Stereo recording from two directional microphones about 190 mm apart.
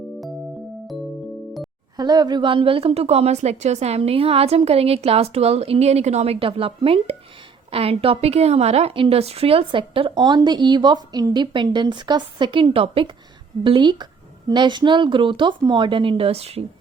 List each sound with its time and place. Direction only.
2.0 s a woman's voice: 20° right (ahead or behind)